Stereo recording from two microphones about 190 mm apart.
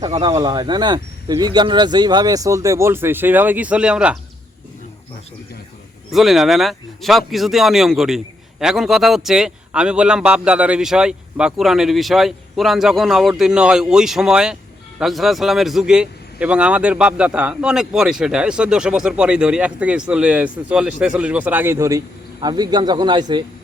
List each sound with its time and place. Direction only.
0.0 s speech: 25° right (ahead or behind); by 4.2 s 5° right (ahead or behind)
6.1 s a man's voice: centre (ahead or behind); by 23.4 s 25° right (ahead or behind)